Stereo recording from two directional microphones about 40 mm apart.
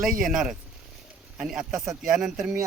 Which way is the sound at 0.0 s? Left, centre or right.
Centre.